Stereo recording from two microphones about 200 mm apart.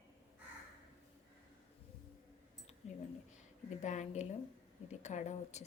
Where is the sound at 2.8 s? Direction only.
35° left (ahead or behind).